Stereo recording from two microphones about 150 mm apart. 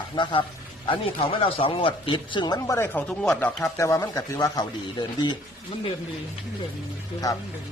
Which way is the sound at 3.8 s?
20° left (ahead or behind).